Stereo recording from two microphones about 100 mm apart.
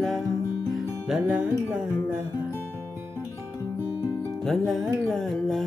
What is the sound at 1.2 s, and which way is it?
Music, 15° right (ahead or behind).